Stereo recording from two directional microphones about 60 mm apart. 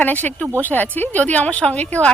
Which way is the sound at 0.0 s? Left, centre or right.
Left.